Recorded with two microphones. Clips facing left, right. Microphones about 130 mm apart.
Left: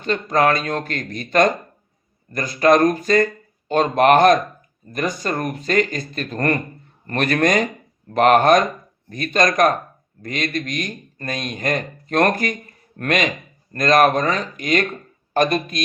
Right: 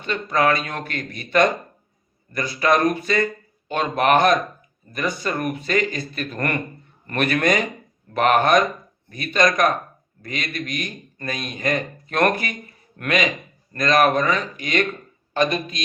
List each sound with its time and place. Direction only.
0.0 s a man's voice: 45° left (ahead or behind)